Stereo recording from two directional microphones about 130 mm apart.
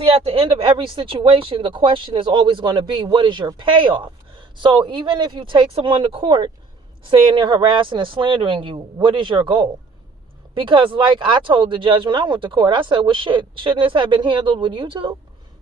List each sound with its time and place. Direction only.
0.0 s speech: 50° right (ahead or behind)